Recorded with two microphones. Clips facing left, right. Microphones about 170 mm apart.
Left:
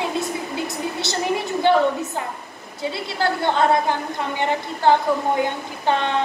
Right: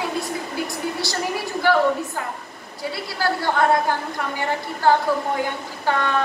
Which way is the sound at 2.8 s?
20° left (ahead or behind).